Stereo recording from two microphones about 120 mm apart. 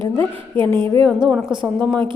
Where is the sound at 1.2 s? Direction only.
Centre (ahead or behind).